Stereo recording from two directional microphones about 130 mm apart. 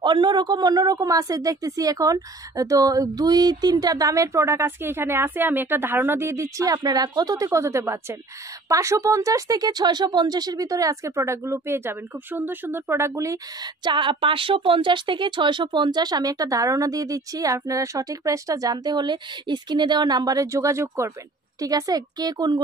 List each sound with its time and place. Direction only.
0.0 s speech: 35° right (ahead or behind)